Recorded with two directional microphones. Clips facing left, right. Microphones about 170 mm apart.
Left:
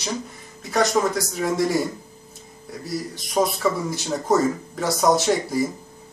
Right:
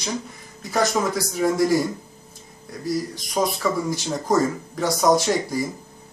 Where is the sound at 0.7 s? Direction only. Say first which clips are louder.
Left 1 dB; centre (ahead or behind).